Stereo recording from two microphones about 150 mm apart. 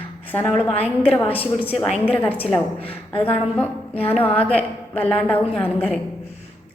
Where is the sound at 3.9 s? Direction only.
40° left (ahead or behind).